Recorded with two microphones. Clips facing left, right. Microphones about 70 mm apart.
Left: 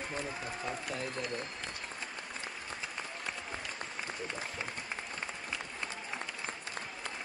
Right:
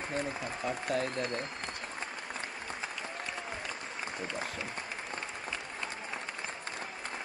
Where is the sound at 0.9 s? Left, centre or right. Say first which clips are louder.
Right 11 dB; right.